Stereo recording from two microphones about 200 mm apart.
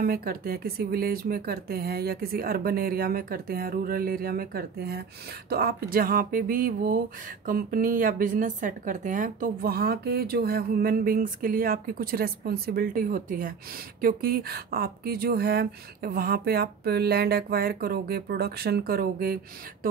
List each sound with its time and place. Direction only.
0.0 s speech: 45° right (ahead or behind)